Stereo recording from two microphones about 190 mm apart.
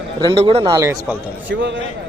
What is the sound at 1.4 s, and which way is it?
Speech, 75° right (ahead or behind).